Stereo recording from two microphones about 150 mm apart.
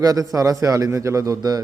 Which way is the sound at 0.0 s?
25° right (ahead or behind).